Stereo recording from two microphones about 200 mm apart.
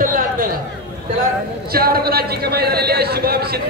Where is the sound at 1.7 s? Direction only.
50° right (ahead or behind).